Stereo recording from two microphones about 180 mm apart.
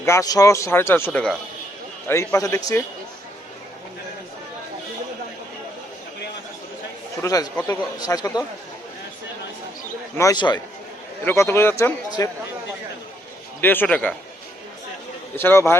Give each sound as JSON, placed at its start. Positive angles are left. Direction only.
{"t": 0.0, "sound": "speech", "side_deg": 15}
{"t": 7.2, "sound": "speech", "side_deg": 20}
{"t": 10.2, "sound": "speech", "side_deg": 20}
{"t": 13.6, "sound": "speech", "side_deg": 10}
{"t": 15.4, "sound": "speech", "side_deg": 15}